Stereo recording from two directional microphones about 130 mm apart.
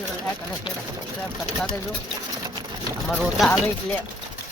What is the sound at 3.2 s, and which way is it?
Speech, centre (ahead or behind).